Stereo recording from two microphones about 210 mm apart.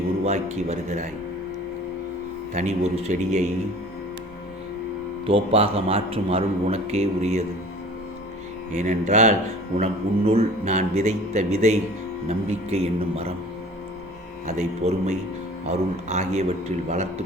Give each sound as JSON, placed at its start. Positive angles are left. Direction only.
{"t": 0.3, "sound": "a man's voice", "side_deg": -30}
{"t": 2.5, "sound": "a man's voice", "side_deg": -30}
{"t": 5.2, "sound": "a man's voice", "side_deg": -25}
{"t": 8.7, "sound": "a man's voice", "side_deg": -35}
{"t": 14.4, "sound": "a man's voice", "side_deg": -35}